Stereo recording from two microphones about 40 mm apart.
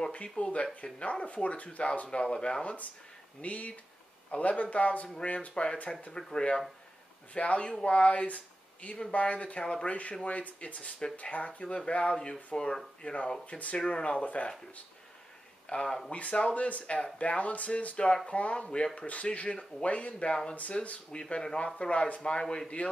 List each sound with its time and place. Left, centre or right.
0.1 s speech: left
2.6 s speech: left
5.5 s speech: left
7.3 s speech: left
13.7 s speech: left
15.7 s speech: left
18.9 s speech: left
20.7 s speech: centre
22.4 s speech: centre